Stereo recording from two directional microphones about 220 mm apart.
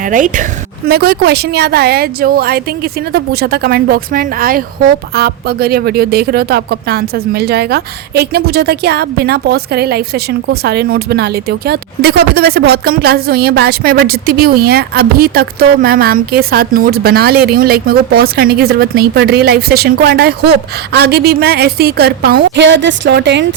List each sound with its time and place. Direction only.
0.0 s a woman's voice: 35° right (ahead or behind); by 23.6 s 55° right (ahead or behind)